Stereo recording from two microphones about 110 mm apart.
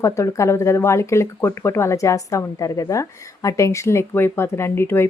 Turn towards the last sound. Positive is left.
turn(degrees=20)  # may be behind; listen again after turning